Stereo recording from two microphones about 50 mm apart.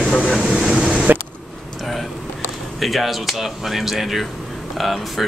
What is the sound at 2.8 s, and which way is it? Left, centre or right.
Speech, centre.